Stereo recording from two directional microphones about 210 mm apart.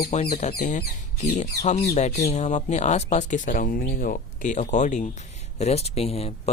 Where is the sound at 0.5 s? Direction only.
40° left (ahead or behind).